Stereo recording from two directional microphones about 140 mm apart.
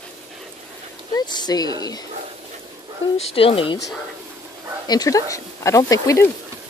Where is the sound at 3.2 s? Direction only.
45° left (ahead or behind).